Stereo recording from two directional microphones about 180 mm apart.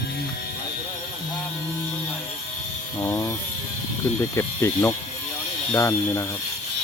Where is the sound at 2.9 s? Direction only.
15° left (ahead or behind).